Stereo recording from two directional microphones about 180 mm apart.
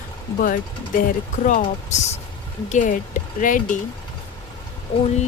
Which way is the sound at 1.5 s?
45° left (ahead or behind).